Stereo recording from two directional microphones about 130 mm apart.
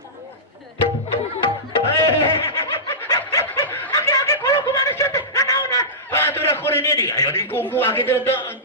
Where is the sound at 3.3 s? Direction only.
25° left (ahead or behind).